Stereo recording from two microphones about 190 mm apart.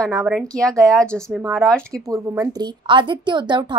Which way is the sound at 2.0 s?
15° right (ahead or behind).